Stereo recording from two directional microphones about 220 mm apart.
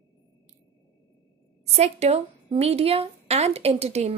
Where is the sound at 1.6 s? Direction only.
30° right (ahead or behind).